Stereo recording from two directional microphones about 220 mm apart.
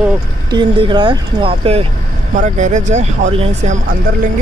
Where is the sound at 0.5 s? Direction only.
20° right (ahead or behind).